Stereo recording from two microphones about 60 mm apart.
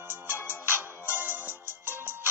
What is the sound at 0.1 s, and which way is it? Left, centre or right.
Music, left.